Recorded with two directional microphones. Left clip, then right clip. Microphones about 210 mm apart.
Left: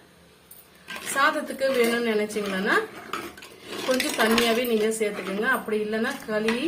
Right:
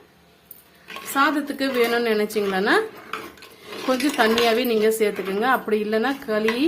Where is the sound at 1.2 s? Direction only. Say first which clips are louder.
Right 2 dB; 55° right (ahead or behind).